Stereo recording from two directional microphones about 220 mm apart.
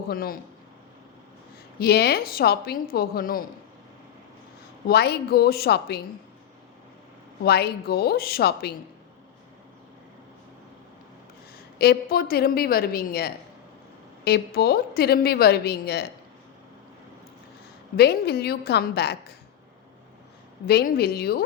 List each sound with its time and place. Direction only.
0.1 s a man's voice: 40° left (ahead or behind)
1.8 s a woman's voice: 45° left (ahead or behind)
4.9 s a woman's voice: 45° left (ahead or behind)
7.4 s a woman's voice: 45° left (ahead or behind)
11.8 s a woman's voice: 45° left (ahead or behind)
17.9 s a woman's voice: 45° left (ahead or behind)
20.7 s a woman's voice: 45° left (ahead or behind)